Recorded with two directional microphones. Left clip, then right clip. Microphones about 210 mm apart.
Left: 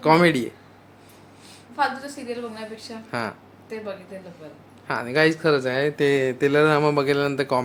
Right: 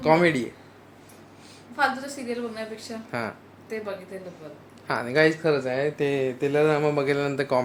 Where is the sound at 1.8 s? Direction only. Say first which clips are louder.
Even; centre (ahead or behind).